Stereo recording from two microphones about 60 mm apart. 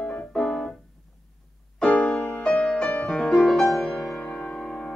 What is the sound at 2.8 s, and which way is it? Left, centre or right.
Music, centre.